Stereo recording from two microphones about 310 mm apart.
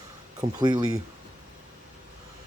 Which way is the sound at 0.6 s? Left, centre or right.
Centre.